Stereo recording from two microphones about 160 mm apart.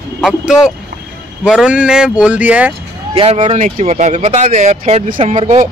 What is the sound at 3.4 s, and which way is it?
Speech, 50° right (ahead or behind).